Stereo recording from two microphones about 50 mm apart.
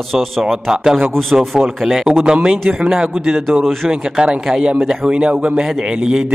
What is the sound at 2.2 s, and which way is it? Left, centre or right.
A man's voice, centre.